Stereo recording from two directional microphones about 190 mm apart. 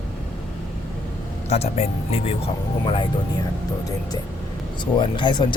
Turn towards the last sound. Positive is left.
turn(degrees=25)  # may be behind; listen again after turning